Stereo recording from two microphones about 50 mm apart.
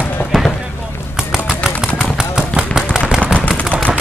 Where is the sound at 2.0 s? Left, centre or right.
Centre.